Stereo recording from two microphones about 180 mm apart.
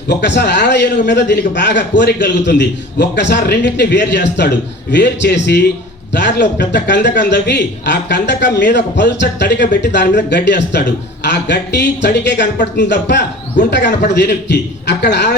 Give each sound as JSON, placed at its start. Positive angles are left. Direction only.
{"t": 0.1, "sound": "a man's voice", "side_deg": 70}